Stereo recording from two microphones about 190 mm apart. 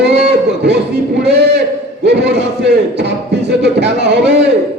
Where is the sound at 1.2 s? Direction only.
65° right (ahead or behind).